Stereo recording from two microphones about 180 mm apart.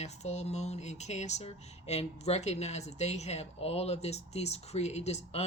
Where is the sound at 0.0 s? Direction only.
40° left (ahead or behind).